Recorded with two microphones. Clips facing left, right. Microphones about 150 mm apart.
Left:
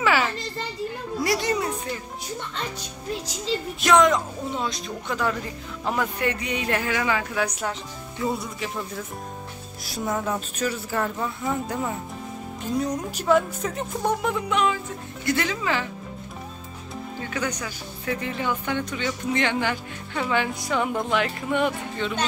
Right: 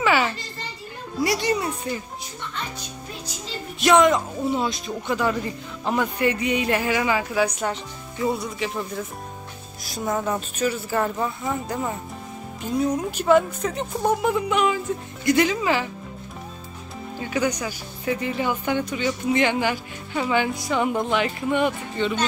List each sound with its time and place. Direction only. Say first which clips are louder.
0.0 s children playing: right 2 dB; centre (ahead or behind)
1.2 s a woman's voice: right 2 dB; centre (ahead or behind)
3.8 s a woman's voice: right 2 dB; 5° right (ahead or behind)
17.2 s speech: right 6 dB; 10° right (ahead or behind)